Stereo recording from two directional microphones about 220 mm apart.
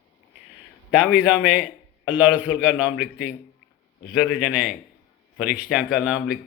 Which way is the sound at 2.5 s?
5° right (ahead or behind).